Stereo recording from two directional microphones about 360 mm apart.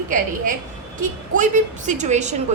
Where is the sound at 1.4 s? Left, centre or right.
Centre.